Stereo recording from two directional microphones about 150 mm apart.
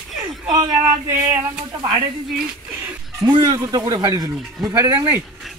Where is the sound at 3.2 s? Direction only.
30° right (ahead or behind).